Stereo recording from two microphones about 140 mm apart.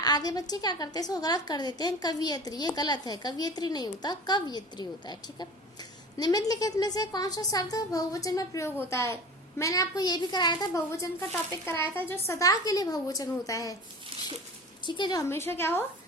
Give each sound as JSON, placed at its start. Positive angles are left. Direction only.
{"t": 0.0, "sound": "a woman's voice", "side_deg": 30}
{"t": 14.8, "sound": "a woman's voice", "side_deg": 35}
{"t": 15.3, "sound": "a woman's voice", "side_deg": 15}